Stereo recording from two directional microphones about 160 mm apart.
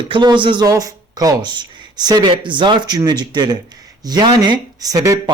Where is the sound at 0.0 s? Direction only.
30° right (ahead or behind).